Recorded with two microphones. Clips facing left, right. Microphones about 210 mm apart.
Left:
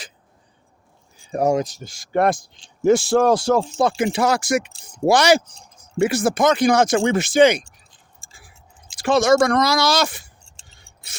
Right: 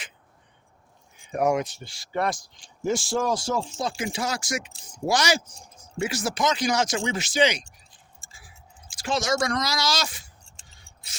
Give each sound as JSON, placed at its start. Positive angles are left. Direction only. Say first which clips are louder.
{"t": 1.1, "sound": "speech", "louder": "left 4 dB", "side_deg": 35}
{"t": 9.0, "sound": "speech", "louder": "left 10 dB", "side_deg": 60}
{"t": 10.6, "sound": "a sound", "louder": "left 2 dB", "side_deg": 25}